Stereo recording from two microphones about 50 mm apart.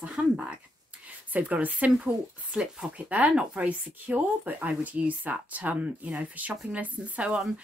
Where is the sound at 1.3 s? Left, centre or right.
Right.